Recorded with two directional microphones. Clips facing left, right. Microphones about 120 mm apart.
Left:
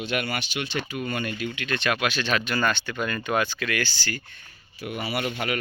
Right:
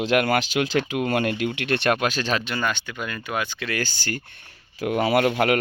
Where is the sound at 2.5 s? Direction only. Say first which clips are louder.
Left 1 dB; 15° right (ahead or behind).